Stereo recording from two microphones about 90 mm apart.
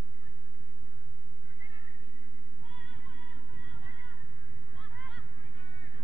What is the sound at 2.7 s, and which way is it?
Music, 15° left (ahead or behind).